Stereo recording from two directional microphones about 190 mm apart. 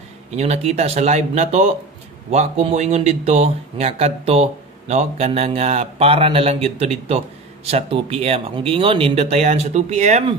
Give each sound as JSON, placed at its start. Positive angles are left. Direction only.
{"t": 0.4, "sound": "speech", "side_deg": -35}